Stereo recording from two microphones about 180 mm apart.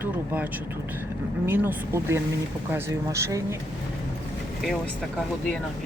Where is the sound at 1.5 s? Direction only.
10° right (ahead or behind).